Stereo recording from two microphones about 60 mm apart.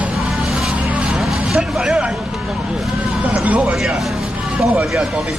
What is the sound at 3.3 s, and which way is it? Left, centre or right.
Speech, right.